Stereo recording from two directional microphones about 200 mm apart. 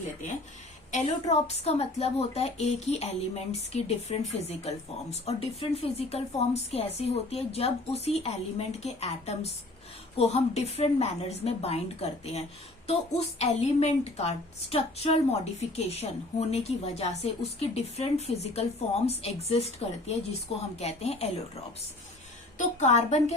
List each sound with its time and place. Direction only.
0.9 s speech: 35° left (ahead or behind)
22.5 s speech: 35° left (ahead or behind)